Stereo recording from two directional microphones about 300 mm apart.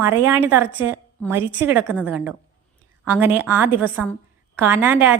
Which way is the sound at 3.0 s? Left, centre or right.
Centre.